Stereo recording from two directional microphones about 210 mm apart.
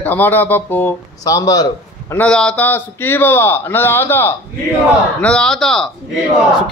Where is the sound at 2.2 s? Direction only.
5° left (ahead or behind).